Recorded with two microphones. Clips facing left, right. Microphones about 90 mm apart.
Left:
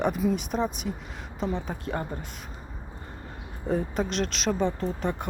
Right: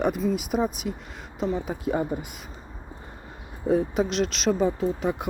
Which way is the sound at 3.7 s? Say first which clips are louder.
Right 4 dB; centre (ahead or behind).